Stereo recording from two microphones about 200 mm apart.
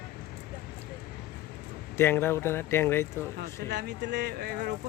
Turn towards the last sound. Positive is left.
turn(degrees=-50)  # may be behind; listen again after turning